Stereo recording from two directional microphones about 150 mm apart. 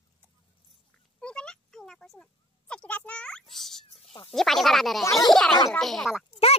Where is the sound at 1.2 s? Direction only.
5° left (ahead or behind).